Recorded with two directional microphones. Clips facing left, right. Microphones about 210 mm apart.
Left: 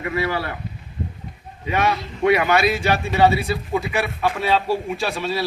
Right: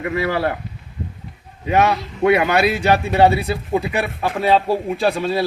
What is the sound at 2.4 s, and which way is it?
Speech, 60° right (ahead or behind).